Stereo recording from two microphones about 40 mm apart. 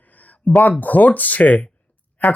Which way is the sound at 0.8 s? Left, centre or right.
Left.